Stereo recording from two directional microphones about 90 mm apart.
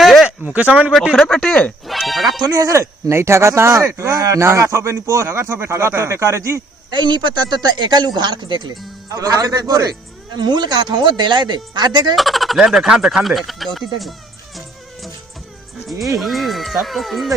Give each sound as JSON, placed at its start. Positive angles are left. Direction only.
{"t": 0.0, "sound": "a sound", "side_deg": 0}
{"t": 0.3, "sound": "speech", "side_deg": -15}
{"t": 1.1, "sound": "speech", "side_deg": 10}
{"t": 1.9, "sound": "music", "side_deg": 0}
{"t": 2.4, "sound": "speech", "side_deg": -40}
{"t": 6.9, "sound": "speech", "side_deg": -55}
{"t": 9.0, "sound": "speech", "side_deg": -40}
{"t": 12.1, "sound": "speech", "side_deg": 0}
{"t": 16.1, "sound": "speech", "side_deg": 0}